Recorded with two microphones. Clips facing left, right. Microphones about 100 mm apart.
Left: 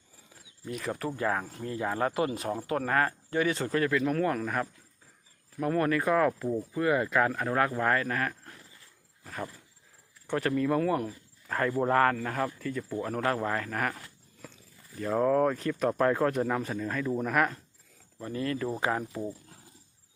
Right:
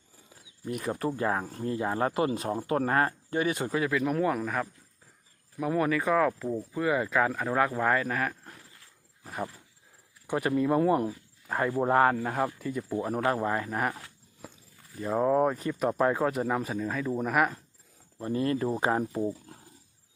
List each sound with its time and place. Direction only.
0.8 s speech: 20° right (ahead or behind)
9.2 s a sound: 15° right (ahead or behind)
10.2 s speech: 15° right (ahead or behind)
15.0 s speech: 15° right (ahead or behind)
18.2 s speech: 30° right (ahead or behind)